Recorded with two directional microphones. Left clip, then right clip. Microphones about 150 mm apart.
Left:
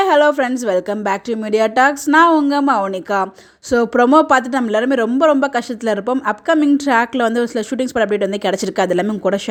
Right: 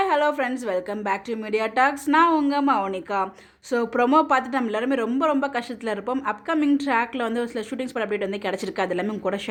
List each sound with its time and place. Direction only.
0.1 s a woman's voice: 55° left (ahead or behind)
1.8 s a woman's voice: 45° left (ahead or behind); by 3.2 s 60° left (ahead or behind)
3.9 s a woman's voice: 45° left (ahead or behind)
4.7 s a man's voice: 40° left (ahead or behind)